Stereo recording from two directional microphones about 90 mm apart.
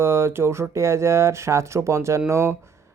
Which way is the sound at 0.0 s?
30° right (ahead or behind).